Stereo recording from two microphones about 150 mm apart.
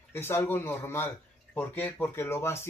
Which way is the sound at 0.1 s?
15° left (ahead or behind).